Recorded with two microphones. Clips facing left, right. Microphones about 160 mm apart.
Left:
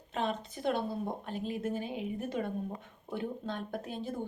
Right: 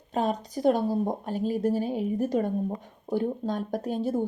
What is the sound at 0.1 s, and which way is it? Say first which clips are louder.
Speech: right 7 dB; 40° right (ahead or behind).